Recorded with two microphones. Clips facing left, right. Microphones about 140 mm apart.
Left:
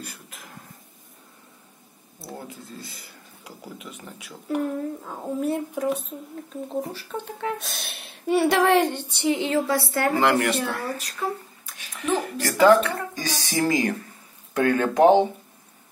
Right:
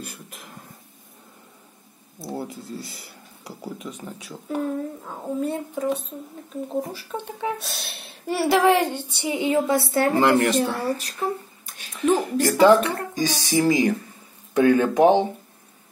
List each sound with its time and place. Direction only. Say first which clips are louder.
2.3 s speech: right 7 dB; 35° right (ahead or behind)
3.8 s speech: right 6 dB; 15° right (ahead or behind)
4.3 s speech: even; centre (ahead or behind)
7.1 s speech: right 1 dB; 15° right (ahead or behind)
7.6 s a woman's voice: right 1 dB; centre (ahead or behind); by 12.2 s 35° right (ahead or behind)
12.4 s a woman's voice: even; 20° right (ahead or behind)